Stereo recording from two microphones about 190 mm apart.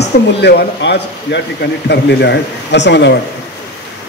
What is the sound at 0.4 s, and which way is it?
Speech, 60° left (ahead or behind).